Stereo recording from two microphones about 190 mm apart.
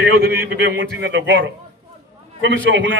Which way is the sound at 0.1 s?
60° right (ahead or behind).